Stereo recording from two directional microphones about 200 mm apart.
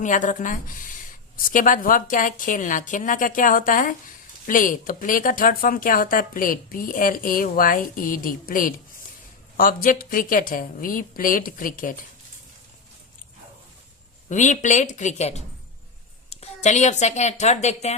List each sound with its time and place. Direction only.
0.0 s a woman's voice: 40° left (ahead or behind)
14.3 s a woman's voice: 40° left (ahead or behind)